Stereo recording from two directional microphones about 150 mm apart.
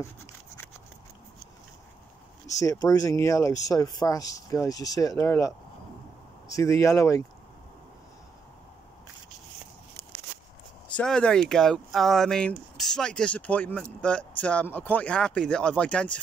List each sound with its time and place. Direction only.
2.6 s speech: 20° left (ahead or behind)
6.5 s speech: 20° left (ahead or behind)
11.0 s speech: 5° left (ahead or behind)